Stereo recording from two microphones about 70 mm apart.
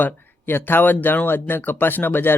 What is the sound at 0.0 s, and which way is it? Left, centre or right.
Speech, left.